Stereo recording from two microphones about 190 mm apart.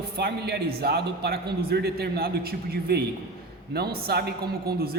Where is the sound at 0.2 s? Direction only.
60° right (ahead or behind).